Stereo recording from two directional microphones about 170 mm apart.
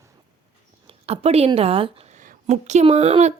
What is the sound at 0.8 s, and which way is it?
Speech, 35° right (ahead or behind).